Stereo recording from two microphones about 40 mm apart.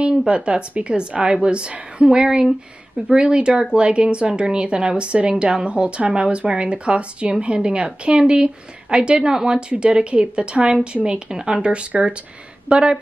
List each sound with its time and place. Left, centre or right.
0.3 s speech: right